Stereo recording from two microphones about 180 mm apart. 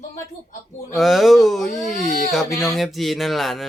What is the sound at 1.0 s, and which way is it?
Speech, centre (ahead or behind).